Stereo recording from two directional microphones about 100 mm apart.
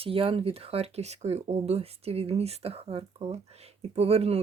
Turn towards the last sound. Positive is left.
turn(degrees=-90)